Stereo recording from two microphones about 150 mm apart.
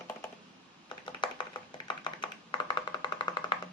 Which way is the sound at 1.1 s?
30° left (ahead or behind).